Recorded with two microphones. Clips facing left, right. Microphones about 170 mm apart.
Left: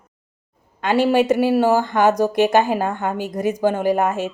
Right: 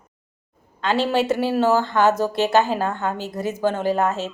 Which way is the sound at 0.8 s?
15° left (ahead or behind).